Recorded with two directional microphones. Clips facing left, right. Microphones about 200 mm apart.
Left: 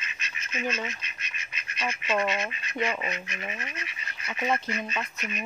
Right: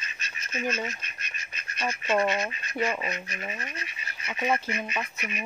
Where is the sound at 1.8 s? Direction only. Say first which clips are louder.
Right 2 dB; 35° right (ahead or behind).